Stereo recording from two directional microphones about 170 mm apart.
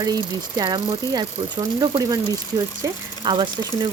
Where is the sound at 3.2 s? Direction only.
30° right (ahead or behind).